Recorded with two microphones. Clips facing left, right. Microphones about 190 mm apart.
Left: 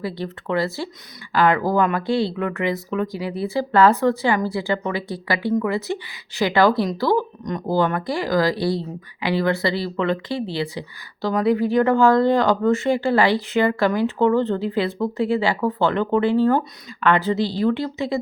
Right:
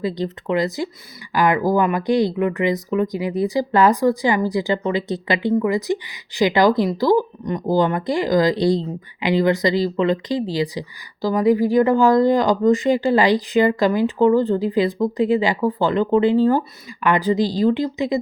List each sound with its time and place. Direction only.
0.0 s speech: 20° right (ahead or behind)